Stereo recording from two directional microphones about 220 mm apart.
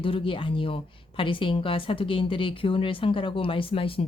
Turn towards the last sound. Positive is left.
turn(degrees=25)  # may be behind; listen again after turning